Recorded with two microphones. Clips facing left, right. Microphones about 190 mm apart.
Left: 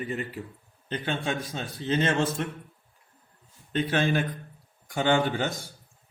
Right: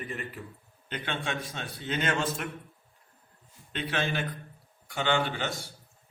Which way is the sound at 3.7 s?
40° left (ahead or behind).